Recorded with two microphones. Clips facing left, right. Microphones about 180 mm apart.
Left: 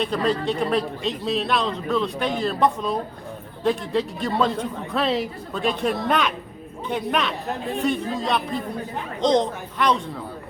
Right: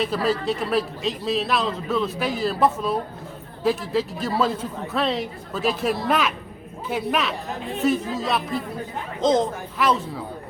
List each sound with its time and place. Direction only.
0.0 s a man's voice: 5° right (ahead or behind)